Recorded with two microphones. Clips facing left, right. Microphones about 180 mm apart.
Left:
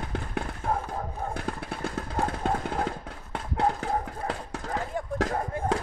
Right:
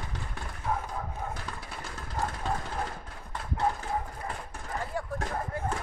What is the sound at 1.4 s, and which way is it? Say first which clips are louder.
Vehicle: left 8 dB; 60° left (ahead or behind).